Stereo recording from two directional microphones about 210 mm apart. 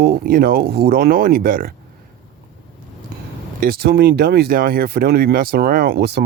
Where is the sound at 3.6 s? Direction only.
45° right (ahead or behind).